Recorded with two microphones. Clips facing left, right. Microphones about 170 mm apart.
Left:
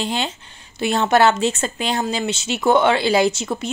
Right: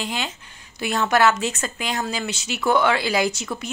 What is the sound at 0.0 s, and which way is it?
Speech, 30° left (ahead or behind).